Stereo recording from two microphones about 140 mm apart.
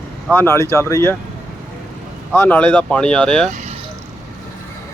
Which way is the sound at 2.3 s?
15° left (ahead or behind).